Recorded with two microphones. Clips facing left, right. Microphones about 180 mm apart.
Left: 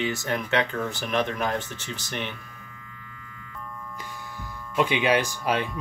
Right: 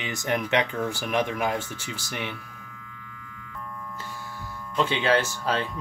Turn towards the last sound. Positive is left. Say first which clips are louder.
# left 1 dB
turn(degrees=15)  # may be behind; listen again after turning